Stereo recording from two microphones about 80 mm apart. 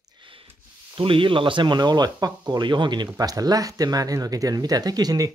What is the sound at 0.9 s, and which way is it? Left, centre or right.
Speech, right.